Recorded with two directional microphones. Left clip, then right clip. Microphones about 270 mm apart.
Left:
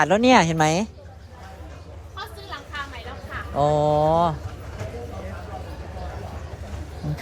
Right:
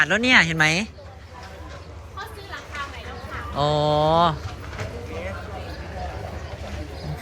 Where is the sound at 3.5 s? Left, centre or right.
Centre.